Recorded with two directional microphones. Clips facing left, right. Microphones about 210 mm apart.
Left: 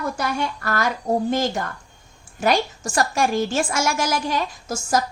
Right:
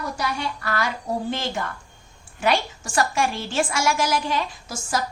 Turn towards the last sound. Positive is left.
turn(degrees=40)  # may be behind; listen again after turning